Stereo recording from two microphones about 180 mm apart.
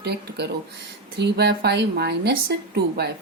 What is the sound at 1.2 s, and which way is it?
A woman's voice, 70° right (ahead or behind).